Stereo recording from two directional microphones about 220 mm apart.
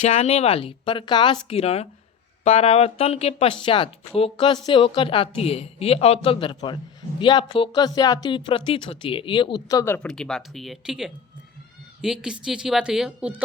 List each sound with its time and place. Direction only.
0.0 s speech: 30° left (ahead or behind); by 13.3 s 5° right (ahead or behind)